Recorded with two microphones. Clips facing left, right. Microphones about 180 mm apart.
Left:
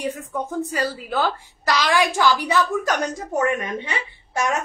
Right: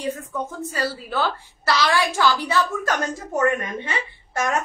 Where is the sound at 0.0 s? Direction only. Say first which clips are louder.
Even; 15° left (ahead or behind).